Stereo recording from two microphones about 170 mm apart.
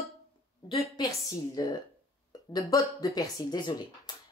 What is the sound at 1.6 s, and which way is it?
Speech, 20° left (ahead or behind).